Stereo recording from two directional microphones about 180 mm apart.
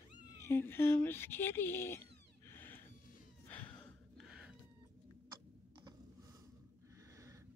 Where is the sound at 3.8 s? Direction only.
Centre (ahead or behind).